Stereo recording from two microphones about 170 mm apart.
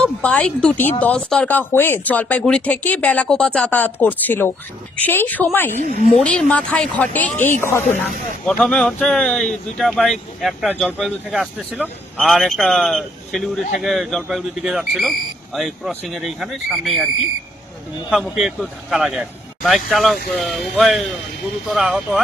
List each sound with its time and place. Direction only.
0.0 s speech: 5° left (ahead or behind)
5.7 s a woman's voice: 45° left (ahead or behind)
6.1 s speech: 5° left (ahead or behind)
8.6 s speech: 5° left (ahead or behind)
18.1 s speech: centre (ahead or behind)